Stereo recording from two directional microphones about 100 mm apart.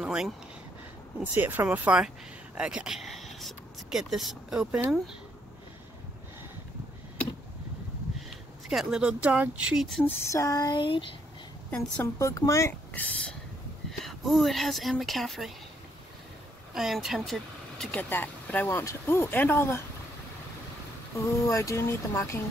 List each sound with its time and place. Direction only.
0.0 s a sound: 10° right (ahead or behind)
1.2 s speech: 20° right (ahead or behind)
8.6 s speech: 5° right (ahead or behind)
10.3 s a sound: 35° left (ahead or behind)
10.8 s a child's voice: 55° left (ahead or behind)
12.0 s speech: 30° left (ahead or behind)
12.9 s a sound: 15° left (ahead or behind)
13.9 s speech: centre (ahead or behind)
16.7 s speech: 5° right (ahead or behind)
17.9 s speech: 15° left (ahead or behind)
21.1 s speech: 30° left (ahead or behind)